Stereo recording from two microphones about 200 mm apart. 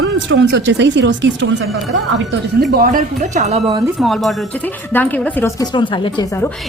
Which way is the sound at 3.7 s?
15° right (ahead or behind).